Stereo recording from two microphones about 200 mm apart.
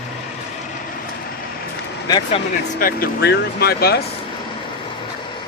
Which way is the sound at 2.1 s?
20° left (ahead or behind).